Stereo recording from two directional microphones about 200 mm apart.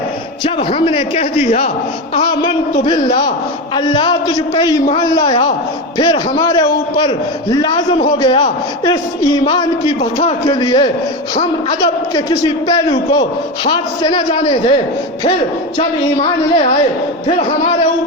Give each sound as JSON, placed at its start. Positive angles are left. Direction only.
{"t": 0.4, "sound": "a man's voice", "side_deg": 25}
{"t": 3.8, "sound": "a man's voice", "side_deg": 20}
{"t": 12.1, "sound": "a man's voice", "side_deg": 20}
{"t": 15.8, "sound": "a man's voice", "side_deg": 30}